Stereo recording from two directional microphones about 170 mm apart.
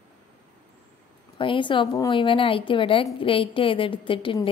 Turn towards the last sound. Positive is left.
turn(degrees=30)  # may be behind; listen again after turning